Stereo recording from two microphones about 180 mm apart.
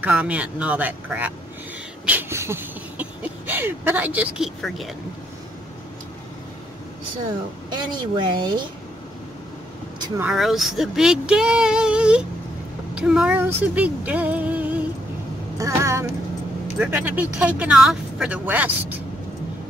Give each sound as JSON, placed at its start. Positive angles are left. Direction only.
{"t": 0.0, "sound": "speech", "side_deg": -10}
{"t": 2.0, "sound": "a sound", "side_deg": -10}
{"t": 7.7, "sound": "speech", "side_deg": -25}
{"t": 10.2, "sound": "speech", "side_deg": 0}
{"t": 15.5, "sound": "a sound", "side_deg": -15}
{"t": 16.7, "sound": "speech", "side_deg": -10}